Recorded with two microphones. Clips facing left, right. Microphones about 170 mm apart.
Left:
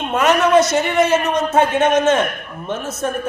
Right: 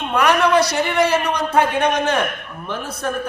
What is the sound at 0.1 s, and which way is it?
A man's voice, 20° left (ahead or behind).